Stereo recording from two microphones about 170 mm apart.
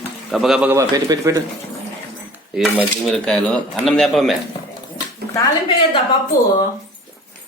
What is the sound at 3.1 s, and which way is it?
Speech, 5° left (ahead or behind).